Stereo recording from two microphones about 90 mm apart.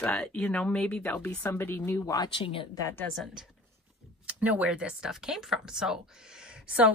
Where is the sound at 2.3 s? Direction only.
85° left.